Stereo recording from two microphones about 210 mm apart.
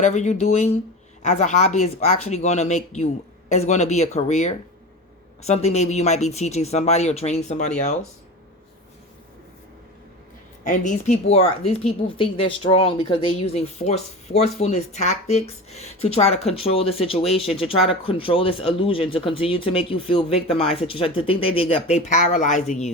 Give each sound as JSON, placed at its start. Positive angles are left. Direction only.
{"t": 0.0, "sound": "speech", "side_deg": 35}
{"t": 10.6, "sound": "speech", "side_deg": 35}